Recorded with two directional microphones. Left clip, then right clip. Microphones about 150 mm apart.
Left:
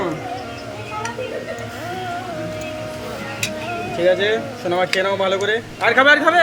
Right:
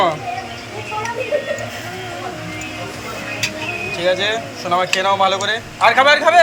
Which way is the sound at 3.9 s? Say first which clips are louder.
Left 1 dB; 20° left (ahead or behind).